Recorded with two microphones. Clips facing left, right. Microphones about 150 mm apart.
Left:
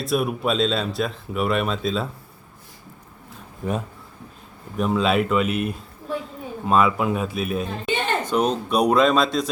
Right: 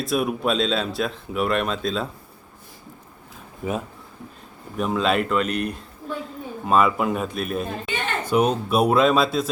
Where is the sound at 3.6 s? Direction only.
5° right (ahead or behind).